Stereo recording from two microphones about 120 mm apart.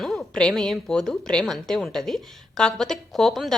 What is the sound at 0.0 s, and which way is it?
A woman's voice, centre (ahead or behind).